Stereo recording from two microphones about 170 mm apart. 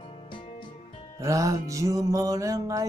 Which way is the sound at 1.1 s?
20° right (ahead or behind).